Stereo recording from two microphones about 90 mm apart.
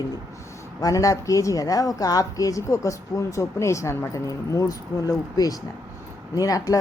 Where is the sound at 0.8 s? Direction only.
40° left (ahead or behind).